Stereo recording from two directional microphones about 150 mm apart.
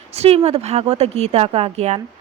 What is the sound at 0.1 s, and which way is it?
Speech, 45° right (ahead or behind).